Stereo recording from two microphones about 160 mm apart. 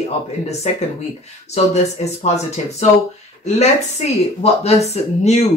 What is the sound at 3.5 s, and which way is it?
Speech, 45° left (ahead or behind).